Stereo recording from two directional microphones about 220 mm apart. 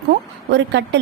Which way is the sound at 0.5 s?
50° right (ahead or behind).